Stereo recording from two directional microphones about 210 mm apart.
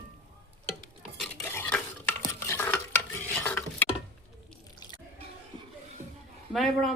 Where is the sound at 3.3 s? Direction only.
10° left (ahead or behind).